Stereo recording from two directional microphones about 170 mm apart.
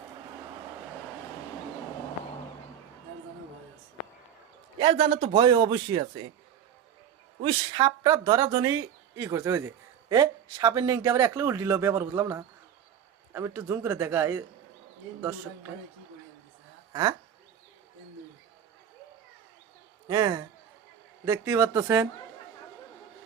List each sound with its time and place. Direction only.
4.8 s a man's voice: 30° right (ahead or behind)
7.4 s speech: 25° right (ahead or behind)
16.9 s speech: 20° right (ahead or behind)
20.1 s a man's voice: 20° right (ahead or behind)